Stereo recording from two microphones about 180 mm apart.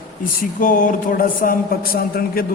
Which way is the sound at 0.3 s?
50° left (ahead or behind).